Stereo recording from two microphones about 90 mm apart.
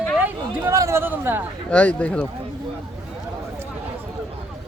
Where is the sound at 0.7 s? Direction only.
35° right (ahead or behind).